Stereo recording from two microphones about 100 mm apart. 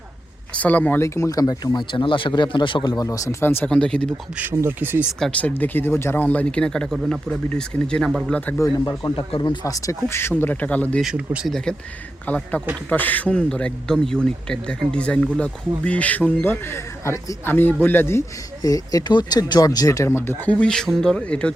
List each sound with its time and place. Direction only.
0.5 s a man's voice: 15° left (ahead or behind)
1.0 s speech: 30° left (ahead or behind)
3.4 s speech: 20° left (ahead or behind)
3.7 s a man's voice: 10° left (ahead or behind)
4.4 s speech: 20° right (ahead or behind)
5.4 s a man's voice: 15° left (ahead or behind)
8.8 s speech: 40° left (ahead or behind); by 11.0 s 15° left (ahead or behind)
11.4 s speech: 5° left (ahead or behind)
12.2 s a man's voice: 15° left (ahead or behind)
18.6 s speech: 35° left (ahead or behind)
20.1 s a man's voice: 25° left (ahead or behind)